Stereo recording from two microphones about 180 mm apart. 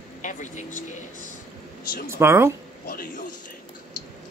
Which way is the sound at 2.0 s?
15° right (ahead or behind).